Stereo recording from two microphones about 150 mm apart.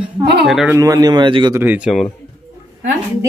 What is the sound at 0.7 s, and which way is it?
Speech, 25° right (ahead or behind).